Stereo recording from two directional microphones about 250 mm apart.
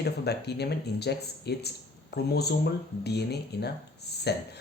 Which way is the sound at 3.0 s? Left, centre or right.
Left.